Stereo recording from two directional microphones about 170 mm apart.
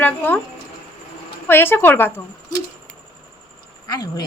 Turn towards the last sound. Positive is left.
turn(degrees=25)  # may be behind; listen again after turning